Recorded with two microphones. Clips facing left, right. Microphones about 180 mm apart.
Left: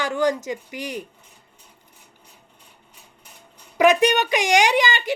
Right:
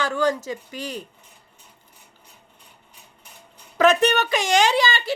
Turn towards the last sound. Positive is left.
turn(degrees=15)  # may be behind; listen again after turning